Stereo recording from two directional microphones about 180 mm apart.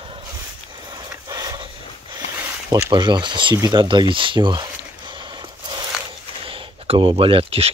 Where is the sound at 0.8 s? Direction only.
20° right (ahead or behind).